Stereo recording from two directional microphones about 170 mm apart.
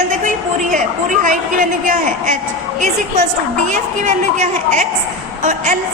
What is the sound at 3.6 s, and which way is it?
A woman's voice, 45° right (ahead or behind).